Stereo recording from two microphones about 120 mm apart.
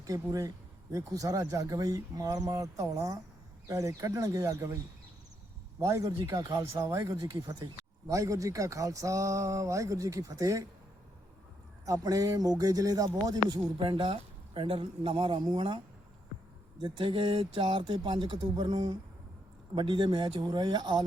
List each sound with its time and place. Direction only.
0.0 s speech: 30° right (ahead or behind)
5.8 s speech: 25° right (ahead or behind)
11.9 s speech: 30° right (ahead or behind)
13.7 s speech: 45° right (ahead or behind)
16.8 s speech: 45° right (ahead or behind)